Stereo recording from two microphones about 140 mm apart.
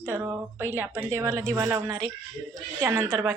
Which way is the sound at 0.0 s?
15° right (ahead or behind).